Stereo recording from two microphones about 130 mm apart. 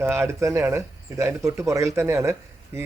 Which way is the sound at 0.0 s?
20° right (ahead or behind).